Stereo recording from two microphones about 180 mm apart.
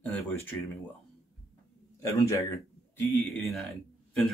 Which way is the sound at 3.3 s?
Centre (ahead or behind).